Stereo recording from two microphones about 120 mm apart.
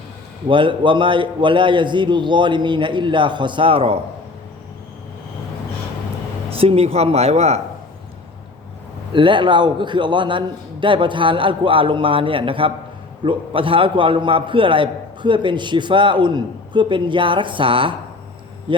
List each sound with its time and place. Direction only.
0.4 s a man's voice: 45° right (ahead or behind)
6.6 s speech: 55° right (ahead or behind)
9.1 s a man's voice: 40° right (ahead or behind)